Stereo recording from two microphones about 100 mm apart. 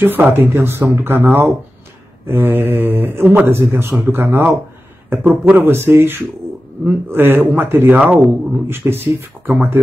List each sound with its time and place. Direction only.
0.0 s speech: 20° right (ahead or behind)